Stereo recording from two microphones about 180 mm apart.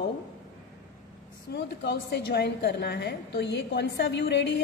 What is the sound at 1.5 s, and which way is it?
A woman's voice, 65° left (ahead or behind).